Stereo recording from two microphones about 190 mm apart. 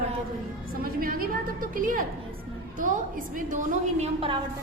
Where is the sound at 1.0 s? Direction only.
50° right (ahead or behind).